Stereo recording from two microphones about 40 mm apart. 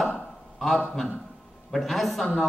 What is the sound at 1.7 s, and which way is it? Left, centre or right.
Speech, centre.